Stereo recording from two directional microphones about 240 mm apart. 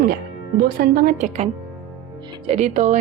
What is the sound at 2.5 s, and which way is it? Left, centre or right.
Speech, right.